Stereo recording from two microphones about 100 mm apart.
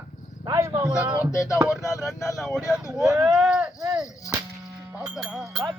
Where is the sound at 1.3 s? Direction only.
30° left (ahead or behind).